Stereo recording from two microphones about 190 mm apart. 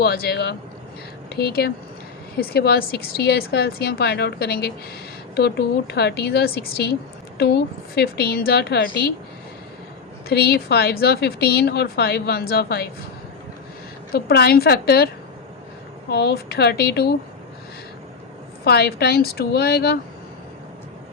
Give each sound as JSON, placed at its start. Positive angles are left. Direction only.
{"t": 0.0, "sound": "a woman's voice", "side_deg": 55}
{"t": 10.2, "sound": "a woman's voice", "side_deg": 55}
{"t": 14.1, "sound": "a woman's voice", "side_deg": 55}
{"t": 18.6, "sound": "a woman's voice", "side_deg": 55}